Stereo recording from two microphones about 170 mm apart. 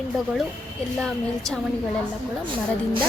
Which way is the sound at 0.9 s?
5° left (ahead or behind).